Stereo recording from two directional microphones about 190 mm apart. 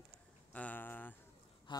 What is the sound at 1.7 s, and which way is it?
Speech, 25° left (ahead or behind).